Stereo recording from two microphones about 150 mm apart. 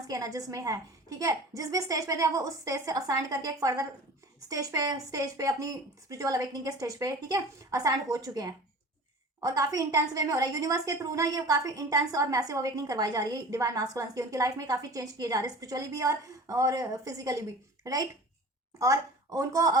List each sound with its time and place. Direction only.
0.1 s a woman's voice: 25° right (ahead or behind)